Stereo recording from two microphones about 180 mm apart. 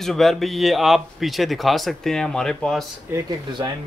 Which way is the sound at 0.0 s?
Centre (ahead or behind).